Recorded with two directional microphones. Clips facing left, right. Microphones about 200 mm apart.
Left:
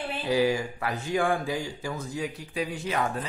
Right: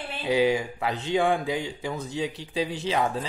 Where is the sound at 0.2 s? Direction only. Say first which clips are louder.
Right 2 dB; 20° right (ahead or behind).